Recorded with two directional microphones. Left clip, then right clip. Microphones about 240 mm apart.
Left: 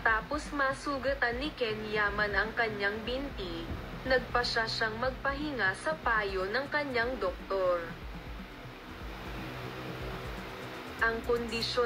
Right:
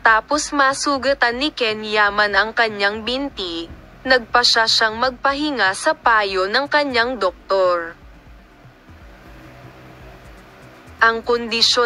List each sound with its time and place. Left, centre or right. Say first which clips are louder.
0.0 s a woman's voice: right 15 dB; right
11.0 s a woman's voice: right 14 dB; right